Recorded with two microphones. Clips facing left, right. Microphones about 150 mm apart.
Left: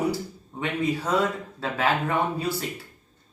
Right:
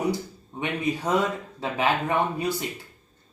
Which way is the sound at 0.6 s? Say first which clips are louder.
Left 1 dB; 15° right (ahead or behind).